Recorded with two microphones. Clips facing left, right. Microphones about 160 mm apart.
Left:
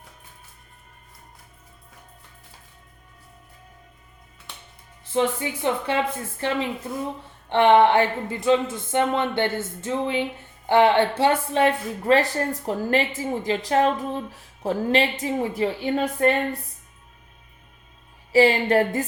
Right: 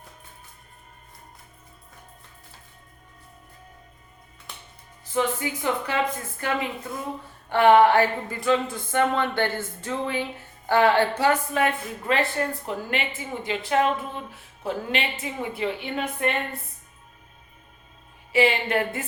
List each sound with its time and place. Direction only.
5.1 s speech: 25° left (ahead or behind)
7.5 s a woman's voice: 25° left (ahead or behind)
18.3 s a woman's voice: 35° left (ahead or behind)